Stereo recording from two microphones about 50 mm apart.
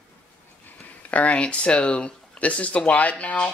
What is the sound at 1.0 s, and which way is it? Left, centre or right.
Speech, left.